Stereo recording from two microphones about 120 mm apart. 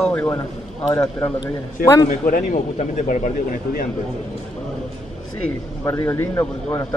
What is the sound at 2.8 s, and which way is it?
Speech, 90° left.